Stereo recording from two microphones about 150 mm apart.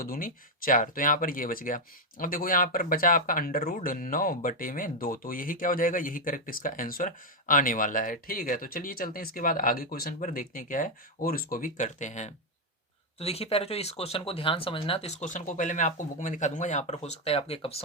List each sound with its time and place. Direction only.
0.0 s speech: 70° left (ahead or behind); by 17.8 s 40° left (ahead or behind)